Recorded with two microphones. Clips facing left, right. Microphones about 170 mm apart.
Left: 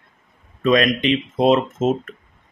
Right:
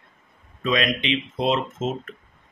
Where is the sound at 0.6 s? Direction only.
45° left (ahead or behind).